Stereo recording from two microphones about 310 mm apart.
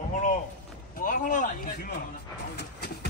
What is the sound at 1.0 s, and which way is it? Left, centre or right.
Speech, left.